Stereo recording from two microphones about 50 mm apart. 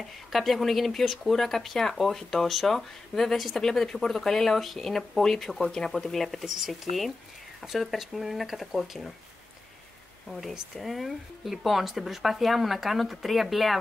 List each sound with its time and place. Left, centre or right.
0.3 s speech: centre
10.2 s speech: centre